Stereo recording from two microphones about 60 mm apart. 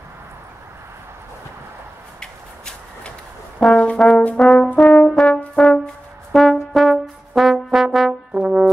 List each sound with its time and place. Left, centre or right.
2.1 s a sound: centre
3.7 s brass instrument: left
6.3 s brass instrument: centre